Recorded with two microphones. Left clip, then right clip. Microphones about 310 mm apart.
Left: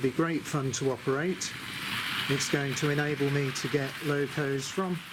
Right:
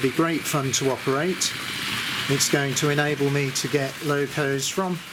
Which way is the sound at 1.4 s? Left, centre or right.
Centre.